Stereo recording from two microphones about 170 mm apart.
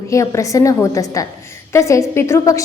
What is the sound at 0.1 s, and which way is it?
A woman's voice, 20° left (ahead or behind).